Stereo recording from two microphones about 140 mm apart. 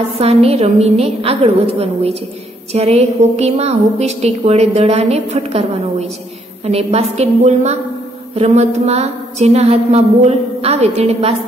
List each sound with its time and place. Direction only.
0.2 s a woman's voice: 45° right (ahead or behind)